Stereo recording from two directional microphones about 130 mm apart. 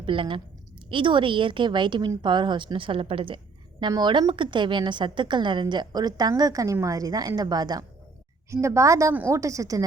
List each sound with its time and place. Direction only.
0.0 s a woman's voice: 40° right (ahead or behind); by 9.8 s 25° right (ahead or behind)